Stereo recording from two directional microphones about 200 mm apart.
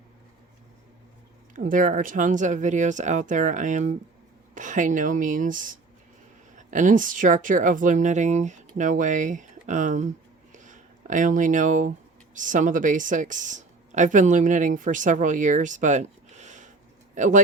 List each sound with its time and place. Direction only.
1.5 s a woman's voice: 40° right (ahead or behind)
10.5 s a sound: 40° right (ahead or behind)
12.3 s a woman's voice: 40° right (ahead or behind)